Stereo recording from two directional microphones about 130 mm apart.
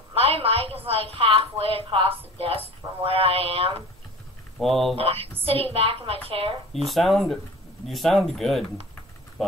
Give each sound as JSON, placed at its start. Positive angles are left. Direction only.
{"t": 0.1, "sound": "a sound", "side_deg": -45}
{"t": 0.8, "sound": "a woman's voice", "side_deg": -50}
{"t": 4.6, "sound": "speech", "side_deg": 0}
{"t": 4.9, "sound": "a woman's voice", "side_deg": -50}
{"t": 6.7, "sound": "speech", "side_deg": 0}